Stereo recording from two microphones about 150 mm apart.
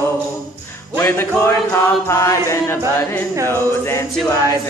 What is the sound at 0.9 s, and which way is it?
Music, 15° left (ahead or behind).